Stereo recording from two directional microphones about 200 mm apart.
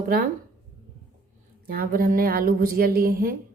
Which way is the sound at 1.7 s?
45° right (ahead or behind).